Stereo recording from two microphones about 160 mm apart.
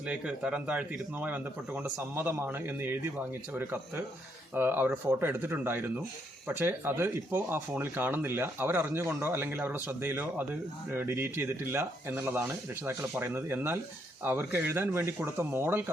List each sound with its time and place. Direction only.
0.1 s speech: 5° right (ahead or behind)